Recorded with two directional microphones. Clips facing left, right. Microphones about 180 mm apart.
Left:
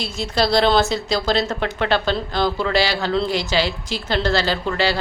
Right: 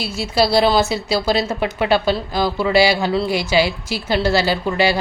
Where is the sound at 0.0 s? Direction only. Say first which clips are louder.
Right 3 dB; 10° right (ahead or behind).